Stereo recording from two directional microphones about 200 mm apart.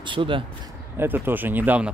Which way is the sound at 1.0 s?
10° right (ahead or behind).